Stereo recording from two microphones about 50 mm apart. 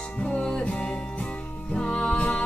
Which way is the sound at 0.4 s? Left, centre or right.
Centre.